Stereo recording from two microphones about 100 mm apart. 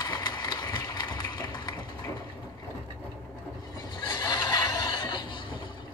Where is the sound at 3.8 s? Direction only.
45° left (ahead or behind).